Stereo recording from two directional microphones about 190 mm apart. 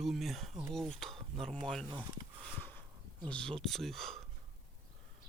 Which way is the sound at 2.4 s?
10° left (ahead or behind).